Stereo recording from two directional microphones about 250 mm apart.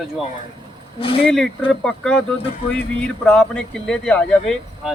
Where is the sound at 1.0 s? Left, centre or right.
Left.